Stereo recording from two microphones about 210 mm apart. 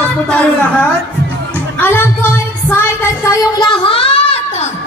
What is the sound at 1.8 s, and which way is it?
Music, 10° left (ahead or behind).